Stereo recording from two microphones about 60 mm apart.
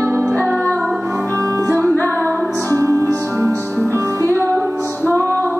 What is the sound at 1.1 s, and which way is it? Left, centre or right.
Music, right.